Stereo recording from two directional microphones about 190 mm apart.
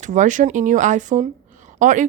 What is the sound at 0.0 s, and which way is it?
A woman's voice, 40° right (ahead or behind).